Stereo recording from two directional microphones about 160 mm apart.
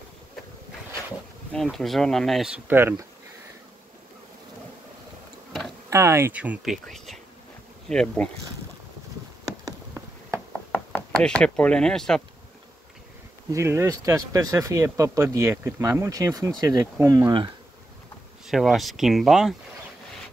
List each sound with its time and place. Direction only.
1.5 s speech: 5° left (ahead or behind); by 3.1 s 15° right (ahead or behind)
5.9 s speech: 15° right (ahead or behind); by 8.3 s 5° left (ahead or behind)
9.4 s insect: 20° right (ahead or behind)
10.7 s speech: 10° left (ahead or behind)
13.5 s speech: 15° right (ahead or behind)
18.5 s speech: centre (ahead or behind)